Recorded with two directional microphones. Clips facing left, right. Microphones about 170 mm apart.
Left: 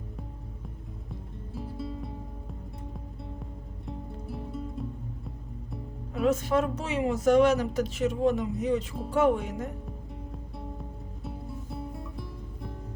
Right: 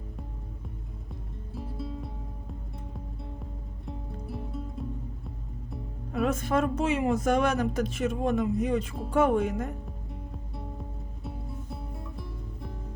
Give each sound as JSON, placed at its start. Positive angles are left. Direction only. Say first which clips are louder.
{"t": 1.5, "sound": "music", "louder": "left 1 dB", "side_deg": 0}
{"t": 3.8, "sound": "music", "louder": "left 1 dB", "side_deg": 0}
{"t": 6.2, "sound": "speech", "louder": "left 2 dB", "side_deg": -50}
{"t": 11.2, "sound": "music", "louder": "left 1 dB", "side_deg": 0}